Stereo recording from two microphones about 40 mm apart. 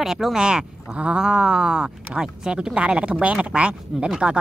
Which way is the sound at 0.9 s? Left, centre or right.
Right.